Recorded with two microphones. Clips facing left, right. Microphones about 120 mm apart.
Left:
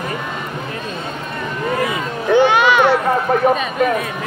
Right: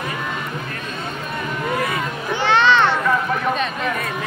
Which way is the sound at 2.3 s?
15° left (ahead or behind).